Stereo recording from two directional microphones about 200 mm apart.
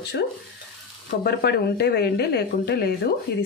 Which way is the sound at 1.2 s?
55° left (ahead or behind).